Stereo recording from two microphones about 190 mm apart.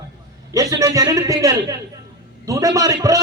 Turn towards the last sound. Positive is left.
turn(degrees=-15)  # may be behind; listen again after turning